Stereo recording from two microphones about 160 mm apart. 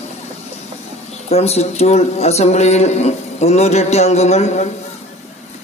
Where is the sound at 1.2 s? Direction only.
40° left (ahead or behind).